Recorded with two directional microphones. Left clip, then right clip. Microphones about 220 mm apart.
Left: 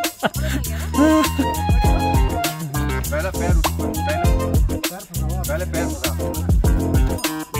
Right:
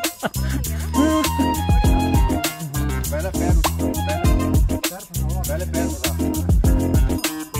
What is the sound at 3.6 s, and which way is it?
Music, centre (ahead or behind).